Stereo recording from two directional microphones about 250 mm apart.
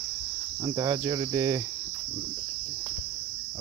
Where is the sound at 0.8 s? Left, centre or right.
Centre.